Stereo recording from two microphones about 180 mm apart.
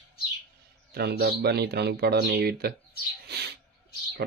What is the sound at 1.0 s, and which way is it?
Speech, 60° right (ahead or behind).